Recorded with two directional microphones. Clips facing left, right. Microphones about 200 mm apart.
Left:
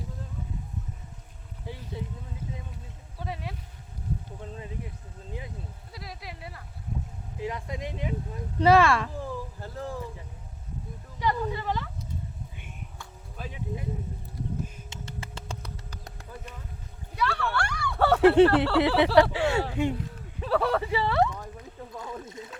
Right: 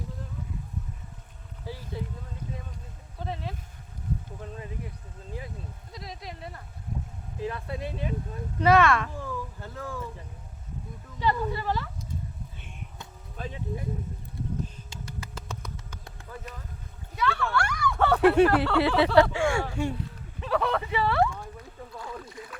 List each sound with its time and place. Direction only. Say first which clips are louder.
3.2 s a sound: right 1 dB; 10° left (ahead or behind)
5.9 s speech: right 2 dB; 5° left (ahead or behind)
7.3 s speech: right 1 dB; 15° left (ahead or behind)
8.5 s speech: left 1 dB; 30° left (ahead or behind)
11.2 s speech: right 1 dB; 15° left (ahead or behind)
13.3 s speech: right 3 dB; 5° left (ahead or behind)
14.8 s a sound: even; 25° left (ahead or behind)
18.3 s speech: left 2 dB; 25° left (ahead or behind)
20.4 s speech: left 2 dB; 35° left (ahead or behind); by 21.5 s 20° left (ahead or behind)
21.9 s a sound: left 1 dB; 20° left (ahead or behind)